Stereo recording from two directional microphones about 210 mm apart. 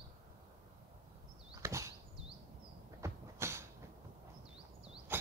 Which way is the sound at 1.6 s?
15° right (ahead or behind).